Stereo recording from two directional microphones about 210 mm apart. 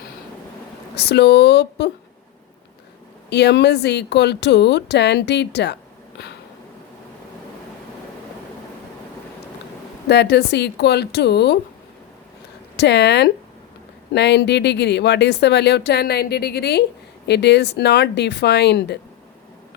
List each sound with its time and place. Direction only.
0.9 s speech: 55° left (ahead or behind)
3.2 s speech: 55° left (ahead or behind)
10.1 s speech: 50° left (ahead or behind)
12.7 s speech: 55° left (ahead or behind)